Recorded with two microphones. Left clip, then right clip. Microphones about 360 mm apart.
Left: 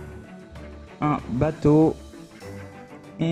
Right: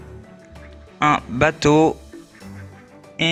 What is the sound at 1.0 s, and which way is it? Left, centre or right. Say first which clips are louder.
Speech: right 8 dB; right.